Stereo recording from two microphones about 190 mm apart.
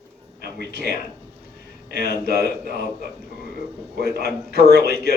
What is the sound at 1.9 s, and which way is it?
Speech, 60° right (ahead or behind).